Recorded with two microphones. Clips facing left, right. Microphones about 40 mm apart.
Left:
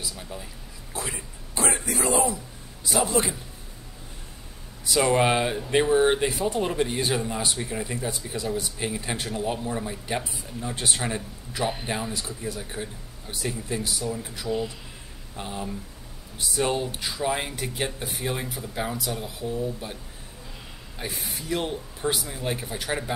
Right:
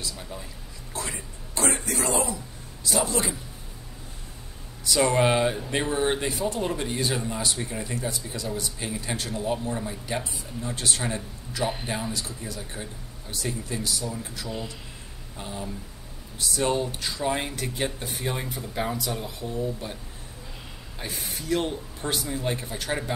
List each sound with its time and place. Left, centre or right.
0.3 s speech: centre
0.9 s a sound: centre
2.8 s speech: centre
5.0 s speech: centre
8.1 s speech: centre
11.6 s speech: centre
12.1 s speech: centre
15.3 s speech: left; by 20.0 s centre
21.0 s speech: centre